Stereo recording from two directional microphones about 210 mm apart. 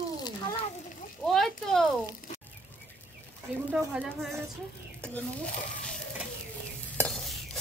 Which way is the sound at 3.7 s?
5° right (ahead or behind).